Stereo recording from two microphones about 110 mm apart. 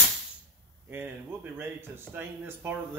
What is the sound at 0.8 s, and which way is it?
Speech, 20° right (ahead or behind).